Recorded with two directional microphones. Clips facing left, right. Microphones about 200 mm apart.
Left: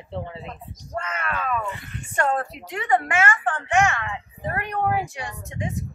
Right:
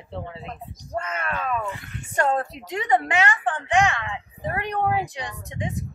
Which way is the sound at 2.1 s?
20° right (ahead or behind).